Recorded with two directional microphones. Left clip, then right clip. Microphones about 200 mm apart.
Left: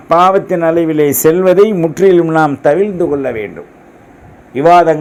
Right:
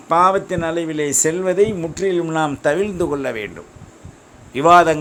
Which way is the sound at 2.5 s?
20° right (ahead or behind).